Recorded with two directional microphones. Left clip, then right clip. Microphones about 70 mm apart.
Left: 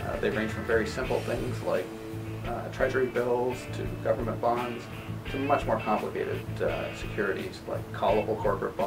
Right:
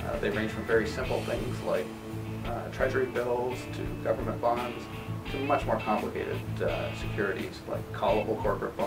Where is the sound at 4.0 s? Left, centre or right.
Centre.